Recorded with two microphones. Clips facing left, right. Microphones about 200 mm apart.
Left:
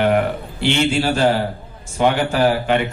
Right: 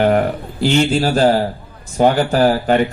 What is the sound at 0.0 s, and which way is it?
A man's voice, 40° right (ahead or behind).